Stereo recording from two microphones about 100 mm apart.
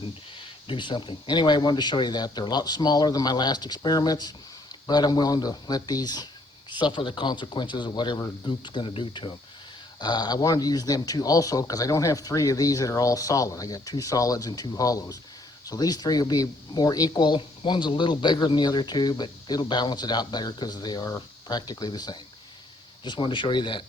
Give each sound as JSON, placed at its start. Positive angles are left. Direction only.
{"t": 0.7, "sound": "speech", "side_deg": 55}
{"t": 10.0, "sound": "speech", "side_deg": 45}